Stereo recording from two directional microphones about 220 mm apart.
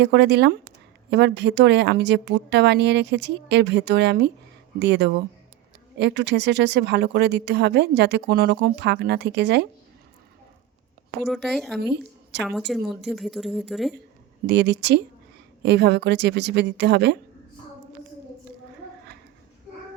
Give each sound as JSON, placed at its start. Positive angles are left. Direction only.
{"t": 0.0, "sound": "speech", "side_deg": -50}
{"t": 11.3, "sound": "speech", "side_deg": 0}
{"t": 11.8, "sound": "a woman's voice", "side_deg": -50}
{"t": 12.5, "sound": "speech", "side_deg": 0}
{"t": 14.4, "sound": "speech", "side_deg": -50}